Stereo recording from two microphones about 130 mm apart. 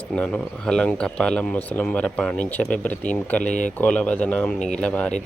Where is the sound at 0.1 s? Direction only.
5° left (ahead or behind).